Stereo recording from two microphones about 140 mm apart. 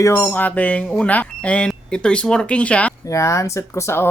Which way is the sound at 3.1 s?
20° left (ahead or behind).